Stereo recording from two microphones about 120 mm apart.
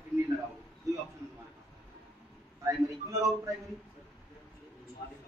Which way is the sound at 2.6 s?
25° right (ahead or behind).